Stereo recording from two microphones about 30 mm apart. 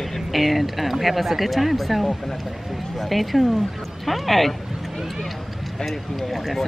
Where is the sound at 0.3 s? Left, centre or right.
Centre.